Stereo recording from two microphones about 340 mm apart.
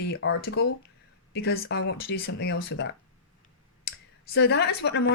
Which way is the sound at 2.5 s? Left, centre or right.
Left.